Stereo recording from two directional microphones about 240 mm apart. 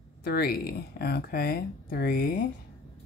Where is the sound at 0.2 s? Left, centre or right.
Left.